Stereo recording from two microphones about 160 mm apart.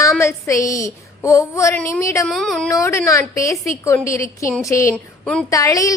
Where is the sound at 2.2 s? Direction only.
Centre (ahead or behind).